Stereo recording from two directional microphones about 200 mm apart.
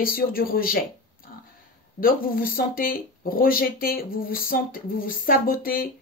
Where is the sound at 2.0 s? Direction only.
45° left (ahead or behind).